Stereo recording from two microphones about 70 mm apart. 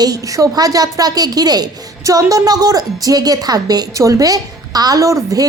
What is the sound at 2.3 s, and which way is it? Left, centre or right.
A woman's voice, right.